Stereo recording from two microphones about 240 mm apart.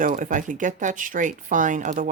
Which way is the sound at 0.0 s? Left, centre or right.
Right.